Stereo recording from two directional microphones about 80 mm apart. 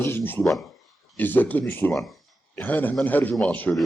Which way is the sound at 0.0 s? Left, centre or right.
Left.